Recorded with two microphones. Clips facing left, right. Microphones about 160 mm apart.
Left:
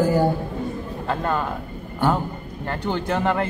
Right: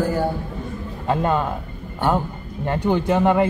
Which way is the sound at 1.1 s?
15° right (ahead or behind).